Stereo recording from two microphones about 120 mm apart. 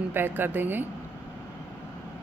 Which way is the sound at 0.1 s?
15° right (ahead or behind).